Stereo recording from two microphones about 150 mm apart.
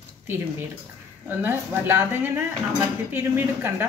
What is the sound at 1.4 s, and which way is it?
Speech, 15° right (ahead or behind).